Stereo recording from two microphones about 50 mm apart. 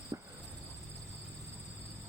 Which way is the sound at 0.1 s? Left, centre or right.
Right.